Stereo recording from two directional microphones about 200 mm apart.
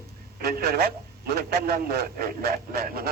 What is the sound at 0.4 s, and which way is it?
A man's voice, 50° right (ahead or behind).